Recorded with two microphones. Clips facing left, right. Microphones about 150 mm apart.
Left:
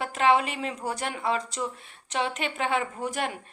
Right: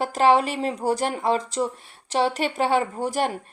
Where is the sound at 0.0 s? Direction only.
35° right (ahead or behind).